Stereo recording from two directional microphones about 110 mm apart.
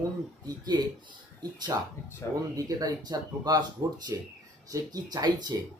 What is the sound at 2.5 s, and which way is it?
Speech, 35° right (ahead or behind).